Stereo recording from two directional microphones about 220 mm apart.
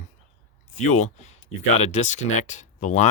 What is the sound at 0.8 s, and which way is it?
Speech, 30° left (ahead or behind).